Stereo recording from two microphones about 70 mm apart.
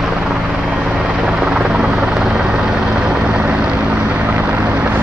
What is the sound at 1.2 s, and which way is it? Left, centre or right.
Helicopter, centre.